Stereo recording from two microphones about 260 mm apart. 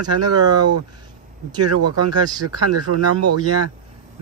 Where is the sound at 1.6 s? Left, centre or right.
Right.